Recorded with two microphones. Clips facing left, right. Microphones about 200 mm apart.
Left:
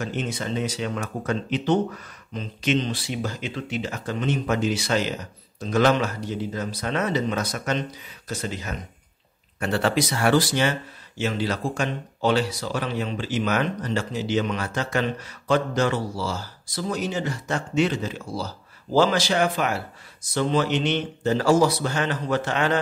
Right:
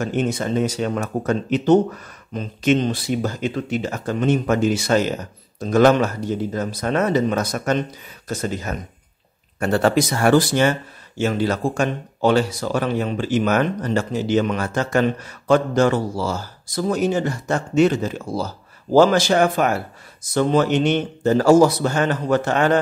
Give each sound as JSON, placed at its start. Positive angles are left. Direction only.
{"t": 0.0, "sound": "speech", "side_deg": -50}